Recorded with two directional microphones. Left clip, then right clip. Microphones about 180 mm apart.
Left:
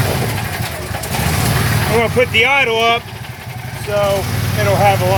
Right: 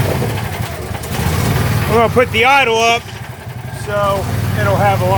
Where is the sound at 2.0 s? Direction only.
15° right (ahead or behind).